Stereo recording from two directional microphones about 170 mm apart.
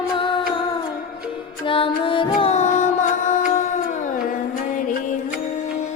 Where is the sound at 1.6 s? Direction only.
30° left (ahead or behind).